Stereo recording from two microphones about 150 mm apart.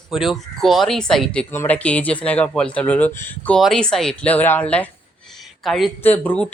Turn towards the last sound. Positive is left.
turn(degrees=10)  # may be behind; listen again after turning